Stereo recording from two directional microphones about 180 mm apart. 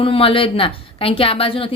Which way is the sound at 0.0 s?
30° left (ahead or behind).